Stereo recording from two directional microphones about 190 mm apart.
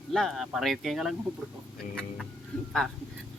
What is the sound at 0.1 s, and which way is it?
Speech, centre (ahead or behind).